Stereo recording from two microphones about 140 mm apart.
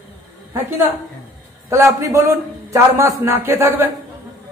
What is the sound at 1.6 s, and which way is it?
A man's voice, 20° right (ahead or behind).